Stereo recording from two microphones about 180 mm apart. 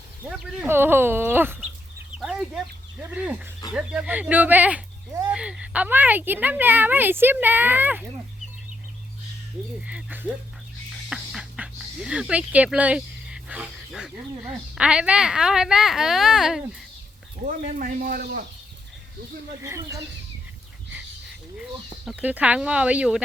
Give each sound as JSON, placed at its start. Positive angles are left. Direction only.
{"t": 0.3, "sound": "speech", "side_deg": -5}
{"t": 2.1, "sound": "chicken", "side_deg": -5}
{"t": 3.0, "sound": "speech", "side_deg": -5}
{"t": 9.8, "sound": "speech", "side_deg": -10}
{"t": 17.4, "sound": "speech", "side_deg": -40}
{"t": 19.6, "sound": "speech", "side_deg": -15}
{"t": 22.0, "sound": "speech", "side_deg": -10}